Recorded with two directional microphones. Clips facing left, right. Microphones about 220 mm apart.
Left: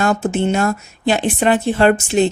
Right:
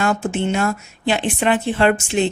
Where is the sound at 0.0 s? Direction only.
40° left (ahead or behind).